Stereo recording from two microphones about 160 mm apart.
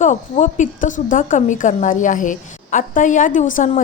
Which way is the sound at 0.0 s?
50° left (ahead or behind).